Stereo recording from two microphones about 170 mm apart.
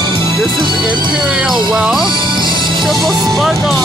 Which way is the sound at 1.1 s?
5° right (ahead or behind).